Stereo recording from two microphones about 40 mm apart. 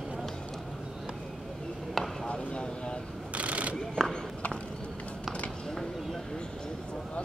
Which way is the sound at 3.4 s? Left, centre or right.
Right.